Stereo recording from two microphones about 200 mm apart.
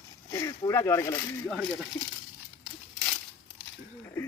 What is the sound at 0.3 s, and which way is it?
Speech, 20° left (ahead or behind).